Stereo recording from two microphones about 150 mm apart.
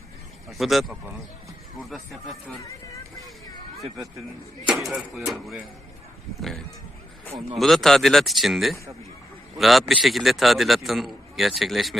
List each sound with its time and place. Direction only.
0.5 s a man's voice: centre (ahead or behind)
2.6 s vehicle: 20° left (ahead or behind)
4.6 s a man's voice: 5° right (ahead or behind)
7.5 s a man's voice: centre (ahead or behind)